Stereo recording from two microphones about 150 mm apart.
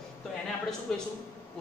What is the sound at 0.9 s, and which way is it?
Speech, 5° left (ahead or behind).